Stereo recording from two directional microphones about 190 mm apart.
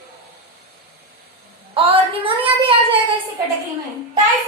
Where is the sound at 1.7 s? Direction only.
30° right (ahead or behind).